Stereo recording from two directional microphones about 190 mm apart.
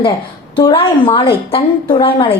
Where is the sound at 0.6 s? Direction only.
25° left (ahead or behind).